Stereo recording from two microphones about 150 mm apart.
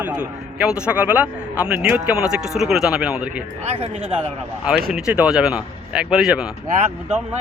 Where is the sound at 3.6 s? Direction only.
45° right (ahead or behind).